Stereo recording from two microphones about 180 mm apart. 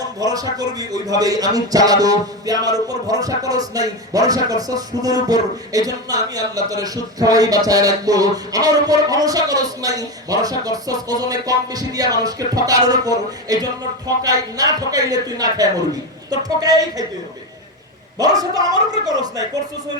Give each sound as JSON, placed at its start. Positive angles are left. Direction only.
{"t": 0.0, "sound": "speech", "side_deg": -20}
{"t": 18.2, "sound": "speech", "side_deg": -20}